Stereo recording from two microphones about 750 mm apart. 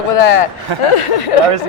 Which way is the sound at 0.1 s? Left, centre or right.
Left.